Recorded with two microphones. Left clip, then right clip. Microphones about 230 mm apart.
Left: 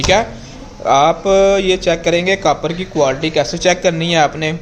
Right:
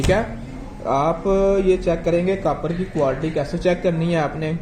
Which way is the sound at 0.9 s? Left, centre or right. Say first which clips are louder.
Left 8 dB; left.